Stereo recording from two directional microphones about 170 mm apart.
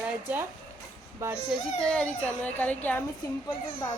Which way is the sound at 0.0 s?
10° right (ahead or behind).